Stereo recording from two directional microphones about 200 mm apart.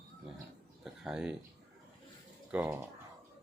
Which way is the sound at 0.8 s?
5° right (ahead or behind).